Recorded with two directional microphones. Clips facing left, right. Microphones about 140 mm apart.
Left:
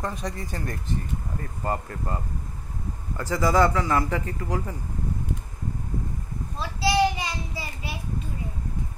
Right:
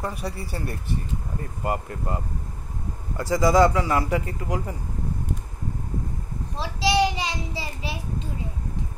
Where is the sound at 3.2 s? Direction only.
15° right (ahead or behind).